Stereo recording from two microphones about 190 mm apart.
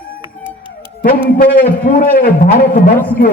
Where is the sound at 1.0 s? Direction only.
55° left (ahead or behind).